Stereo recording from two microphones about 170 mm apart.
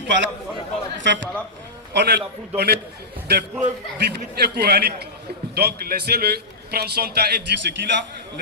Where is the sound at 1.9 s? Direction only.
75° right (ahead or behind).